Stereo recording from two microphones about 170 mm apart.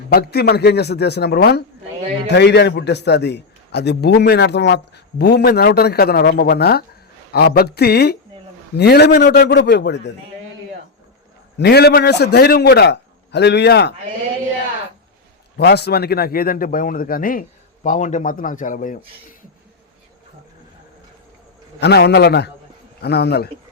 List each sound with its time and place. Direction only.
0.1 s a man's voice: 70° left (ahead or behind); by 10.1 s 90° left
11.5 s a man's voice: 75° left (ahead or behind)
15.5 s a man's voice: 75° left (ahead or behind); by 18.9 s 50° left (ahead or behind)
21.8 s a man's voice: 75° left (ahead or behind)